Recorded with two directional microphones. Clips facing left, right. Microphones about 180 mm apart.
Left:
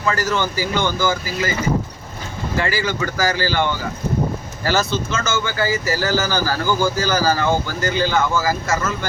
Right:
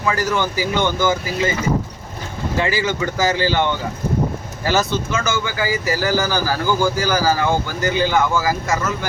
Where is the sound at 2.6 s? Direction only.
20° right (ahead or behind).